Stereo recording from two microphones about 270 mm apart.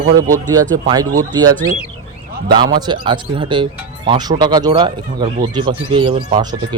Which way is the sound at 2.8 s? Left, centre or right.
Centre.